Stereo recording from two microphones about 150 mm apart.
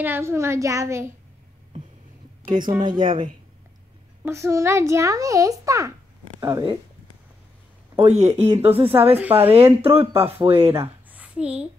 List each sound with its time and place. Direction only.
0.0 s a child's voice: 15° right (ahead or behind)
2.4 s speech: 30° right (ahead or behind)
4.2 s a child's voice: 20° right (ahead or behind)
7.9 s speech: 45° right (ahead or behind)
8.5 s a child's voice: 20° right (ahead or behind)
8.7 s speech: 40° right (ahead or behind)
9.1 s a child's voice: 10° right (ahead or behind)
9.8 s speech: 40° right (ahead or behind)
10.7 s a sound: 15° right (ahead or behind)